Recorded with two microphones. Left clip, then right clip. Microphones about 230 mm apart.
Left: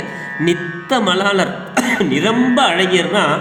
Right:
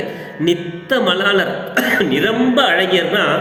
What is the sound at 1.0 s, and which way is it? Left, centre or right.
A man's voice, left.